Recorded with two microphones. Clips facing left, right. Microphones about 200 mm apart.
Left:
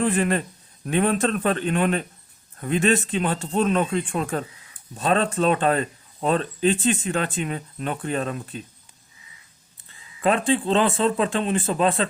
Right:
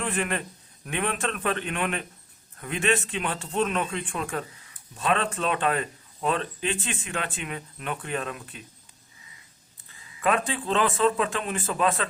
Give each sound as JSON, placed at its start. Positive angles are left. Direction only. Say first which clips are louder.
{"t": 0.0, "sound": "speech", "louder": "left 7 dB", "side_deg": 35}
{"t": 10.2, "sound": "speech", "louder": "left 5 dB", "side_deg": 30}